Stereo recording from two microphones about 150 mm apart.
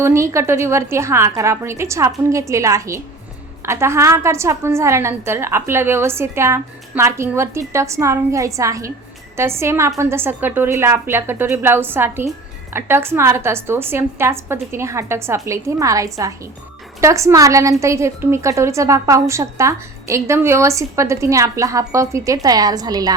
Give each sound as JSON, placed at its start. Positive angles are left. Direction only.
{"t": 0.0, "sound": "a woman's voice", "side_deg": -20}